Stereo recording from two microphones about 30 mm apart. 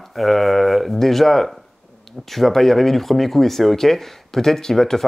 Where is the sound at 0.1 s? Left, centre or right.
Centre.